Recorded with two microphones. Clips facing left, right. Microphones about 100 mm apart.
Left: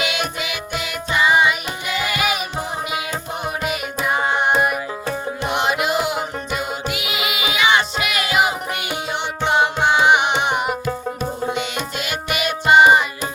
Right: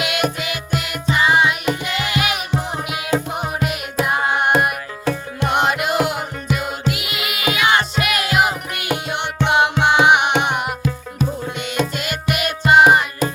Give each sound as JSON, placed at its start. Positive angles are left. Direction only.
{"t": 0.0, "sound": "music", "side_deg": 0}
{"t": 4.0, "sound": "carnatic music", "side_deg": 0}
{"t": 5.5, "sound": "music", "side_deg": -50}
{"t": 6.6, "sound": "music", "side_deg": 0}
{"t": 9.4, "sound": "music", "side_deg": -65}
{"t": 11.9, "sound": "music", "side_deg": 0}